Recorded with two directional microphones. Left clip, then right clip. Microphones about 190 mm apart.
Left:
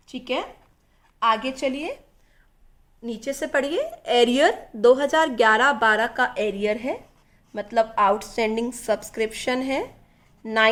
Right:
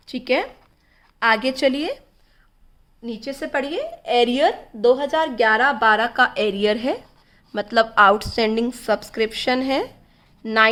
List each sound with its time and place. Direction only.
0.1 s a woman's voice: 50° right (ahead or behind)
3.0 s speech: 5° left (ahead or behind)
5.8 s a woman's voice: centre (ahead or behind)
6.1 s speech: 20° right (ahead or behind); by 8.3 s 35° right (ahead or behind)
8.3 s speech: 25° right (ahead or behind)